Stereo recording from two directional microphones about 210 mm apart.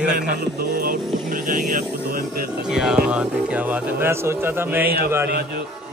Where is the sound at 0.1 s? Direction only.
40° right (ahead or behind).